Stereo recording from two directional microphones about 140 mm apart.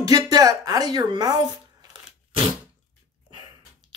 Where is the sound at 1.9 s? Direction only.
40° right (ahead or behind).